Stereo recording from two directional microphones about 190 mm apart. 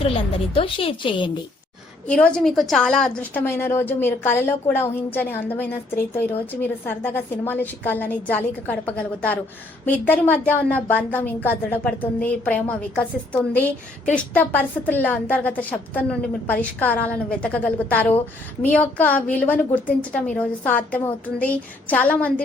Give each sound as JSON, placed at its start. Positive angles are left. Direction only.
{"t": 0.0, "sound": "a woman's voice", "side_deg": 30}
{"t": 2.0, "sound": "a woman's voice", "side_deg": 5}